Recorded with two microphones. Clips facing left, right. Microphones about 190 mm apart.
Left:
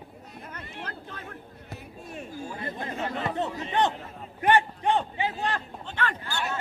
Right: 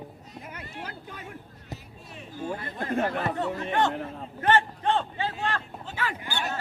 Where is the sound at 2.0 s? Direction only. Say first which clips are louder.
Even; 45° left (ahead or behind).